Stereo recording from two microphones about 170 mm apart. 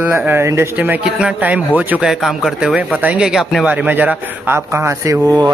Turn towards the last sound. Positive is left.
turn(degrees=-20)  # may be behind; listen again after turning